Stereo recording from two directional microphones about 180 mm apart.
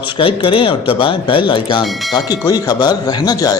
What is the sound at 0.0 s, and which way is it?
Speech, 30° left (ahead or behind).